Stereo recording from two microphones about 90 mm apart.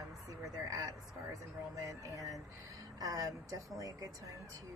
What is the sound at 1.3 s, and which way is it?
A woman's voice, 40° right (ahead or behind).